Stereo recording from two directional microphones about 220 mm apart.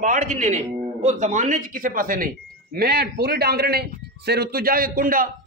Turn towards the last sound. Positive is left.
turn(degrees=-40)  # may be behind; listen again after turning